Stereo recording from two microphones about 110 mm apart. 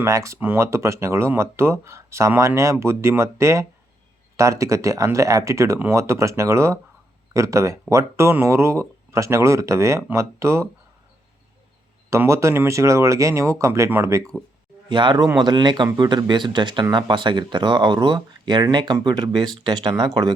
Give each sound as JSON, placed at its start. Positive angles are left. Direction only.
{"t": 0.0, "sound": "speech", "side_deg": -30}
{"t": 12.1, "sound": "speech", "side_deg": -25}
{"t": 14.8, "sound": "speech", "side_deg": -45}